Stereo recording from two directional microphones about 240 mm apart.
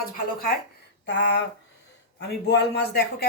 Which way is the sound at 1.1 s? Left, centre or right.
Left.